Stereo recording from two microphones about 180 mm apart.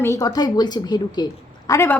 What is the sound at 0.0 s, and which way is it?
A woman's voice, 15° left (ahead or behind).